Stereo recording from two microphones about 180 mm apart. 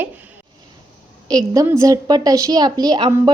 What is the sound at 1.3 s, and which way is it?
A woman's voice, 20° right (ahead or behind).